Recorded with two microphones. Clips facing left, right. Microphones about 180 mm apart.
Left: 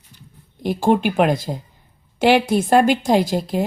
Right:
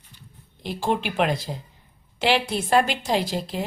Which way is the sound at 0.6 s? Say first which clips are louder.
Left 8 dB; 50° left (ahead or behind).